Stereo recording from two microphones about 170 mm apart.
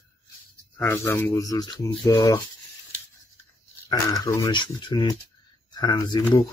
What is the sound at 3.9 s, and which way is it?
Speech, 20° left (ahead or behind).